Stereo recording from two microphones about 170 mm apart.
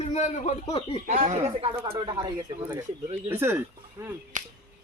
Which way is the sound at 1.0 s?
40° right (ahead or behind).